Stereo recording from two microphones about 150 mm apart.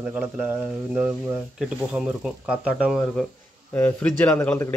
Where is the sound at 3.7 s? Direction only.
15° left (ahead or behind).